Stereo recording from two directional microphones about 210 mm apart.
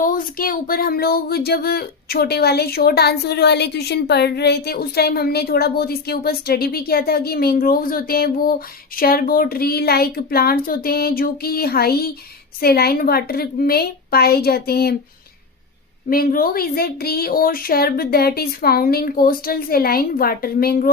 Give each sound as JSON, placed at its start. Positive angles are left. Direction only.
{"t": 0.0, "sound": "speech", "side_deg": 40}
{"t": 16.0, "sound": "speech", "side_deg": 45}